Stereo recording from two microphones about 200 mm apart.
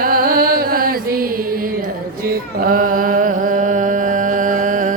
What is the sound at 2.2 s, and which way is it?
Music, 45° right (ahead or behind).